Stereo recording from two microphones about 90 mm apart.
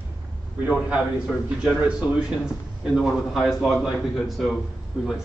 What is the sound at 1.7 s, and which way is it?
A man's voice, 10° right (ahead or behind).